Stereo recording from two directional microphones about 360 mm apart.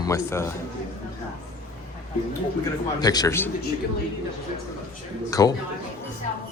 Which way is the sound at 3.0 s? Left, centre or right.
Centre.